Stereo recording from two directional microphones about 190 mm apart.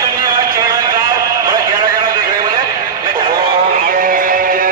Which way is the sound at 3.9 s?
45° right (ahead or behind).